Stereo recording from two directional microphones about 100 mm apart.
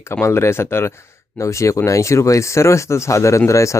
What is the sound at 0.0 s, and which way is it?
Speech, 25° left (ahead or behind).